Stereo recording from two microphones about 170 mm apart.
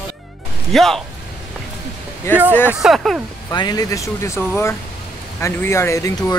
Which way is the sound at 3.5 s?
25° left (ahead or behind).